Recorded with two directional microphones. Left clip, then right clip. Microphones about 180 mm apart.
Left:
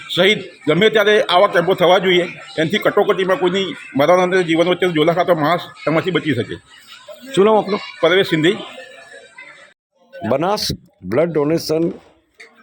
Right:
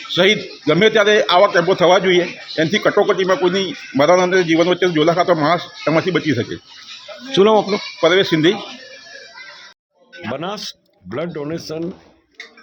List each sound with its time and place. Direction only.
0.1 s a man's voice: centre (ahead or behind)
10.3 s speech: 25° left (ahead or behind)